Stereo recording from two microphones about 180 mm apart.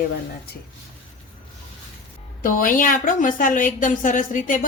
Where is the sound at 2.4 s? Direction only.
50° left (ahead or behind).